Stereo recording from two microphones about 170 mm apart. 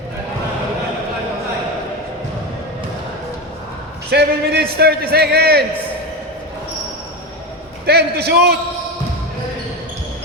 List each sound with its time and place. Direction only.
4.1 s a man's voice: 70° right (ahead or behind)
7.9 s a man's voice: 70° right (ahead or behind)